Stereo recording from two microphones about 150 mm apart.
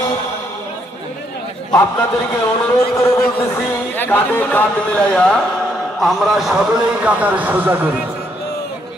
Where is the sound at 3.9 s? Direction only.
10° left (ahead or behind); by 7.8 s 10° right (ahead or behind).